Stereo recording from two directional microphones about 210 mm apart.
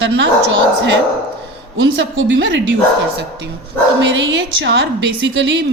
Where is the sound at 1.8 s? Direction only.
65° right (ahead or behind).